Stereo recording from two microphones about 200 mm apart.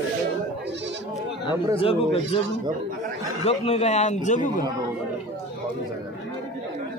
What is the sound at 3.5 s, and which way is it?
A man's voice, 30° left (ahead or behind).